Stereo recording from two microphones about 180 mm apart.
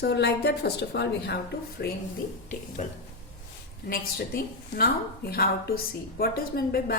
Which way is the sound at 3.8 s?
55° left (ahead or behind).